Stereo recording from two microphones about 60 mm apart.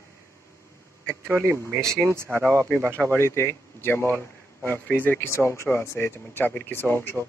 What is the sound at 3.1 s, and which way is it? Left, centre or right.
A man's voice, left.